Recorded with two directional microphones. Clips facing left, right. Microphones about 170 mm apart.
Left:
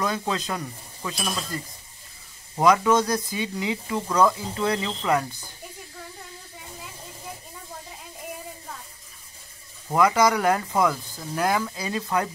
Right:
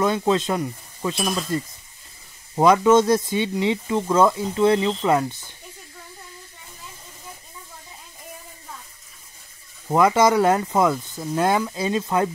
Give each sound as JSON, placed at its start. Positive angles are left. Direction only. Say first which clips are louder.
{"t": 0.0, "sound": "speech", "louder": "right 7 dB", "side_deg": -25}
{"t": 9.8, "sound": "speech", "louder": "right 3 dB", "side_deg": -25}